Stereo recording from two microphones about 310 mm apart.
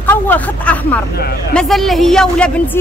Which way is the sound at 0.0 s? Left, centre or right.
Centre.